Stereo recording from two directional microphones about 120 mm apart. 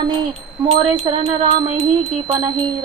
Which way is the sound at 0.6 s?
40° right (ahead or behind).